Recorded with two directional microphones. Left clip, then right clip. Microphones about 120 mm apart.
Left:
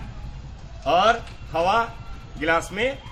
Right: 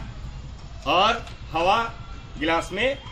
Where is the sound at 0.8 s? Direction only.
15° left (ahead or behind).